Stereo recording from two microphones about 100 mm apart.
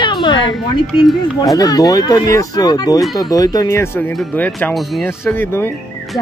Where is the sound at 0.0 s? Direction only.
45° left (ahead or behind).